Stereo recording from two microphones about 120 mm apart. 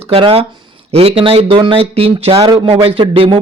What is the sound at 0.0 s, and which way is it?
A man's voice, 50° right (ahead or behind).